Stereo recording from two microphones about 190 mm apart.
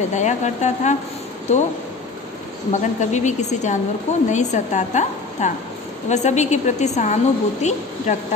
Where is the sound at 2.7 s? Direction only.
40° left (ahead or behind).